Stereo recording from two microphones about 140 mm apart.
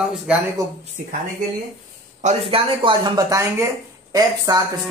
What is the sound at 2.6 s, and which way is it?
Speech, 35° right (ahead or behind).